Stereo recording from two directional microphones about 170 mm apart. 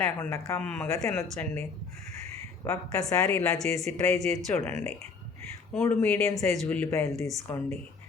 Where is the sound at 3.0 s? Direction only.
10° left (ahead or behind).